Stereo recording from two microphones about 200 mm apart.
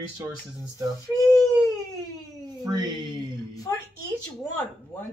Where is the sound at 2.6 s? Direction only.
20° right (ahead or behind).